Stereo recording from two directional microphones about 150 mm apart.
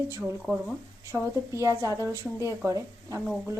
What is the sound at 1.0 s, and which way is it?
Speech, 20° right (ahead or behind).